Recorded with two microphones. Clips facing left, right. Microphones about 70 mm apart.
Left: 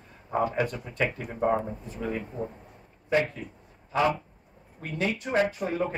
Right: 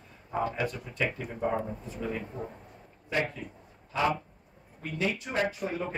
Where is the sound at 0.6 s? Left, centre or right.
Left.